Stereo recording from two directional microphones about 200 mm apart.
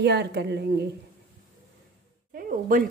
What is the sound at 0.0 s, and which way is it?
Speech, 55° right (ahead or behind).